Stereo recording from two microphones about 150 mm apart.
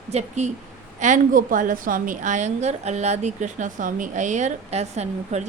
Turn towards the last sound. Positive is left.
turn(degrees=-45)  # may be behind; listen again after turning